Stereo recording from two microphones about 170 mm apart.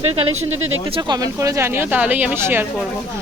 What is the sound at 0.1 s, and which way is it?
A woman's voice, 35° right (ahead or behind).